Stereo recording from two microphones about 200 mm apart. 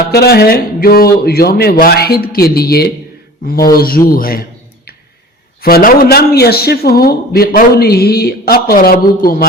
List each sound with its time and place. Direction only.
0.1 s a man's voice: 50° left (ahead or behind)
5.6 s a man's voice: 45° left (ahead or behind)